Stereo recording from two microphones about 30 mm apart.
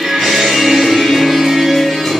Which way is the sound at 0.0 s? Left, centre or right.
Centre.